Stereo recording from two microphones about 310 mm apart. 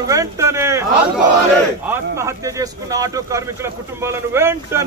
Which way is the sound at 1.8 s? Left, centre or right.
Centre.